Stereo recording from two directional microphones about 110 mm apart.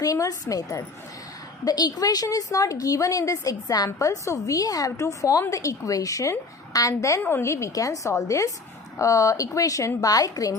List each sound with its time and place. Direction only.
0.0 s a woman's voice: 30° left (ahead or behind)
7.2 s a woman's voice: 20° left (ahead or behind)